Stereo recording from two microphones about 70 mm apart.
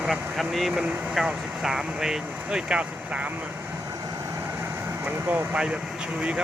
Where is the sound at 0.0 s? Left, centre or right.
Centre.